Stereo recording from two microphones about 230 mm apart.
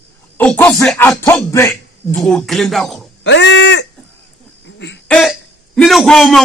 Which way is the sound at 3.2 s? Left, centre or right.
Left.